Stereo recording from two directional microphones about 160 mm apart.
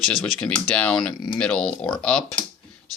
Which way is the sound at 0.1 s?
5° left (ahead or behind).